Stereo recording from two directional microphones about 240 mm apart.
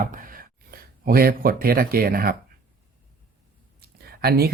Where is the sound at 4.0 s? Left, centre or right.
Right.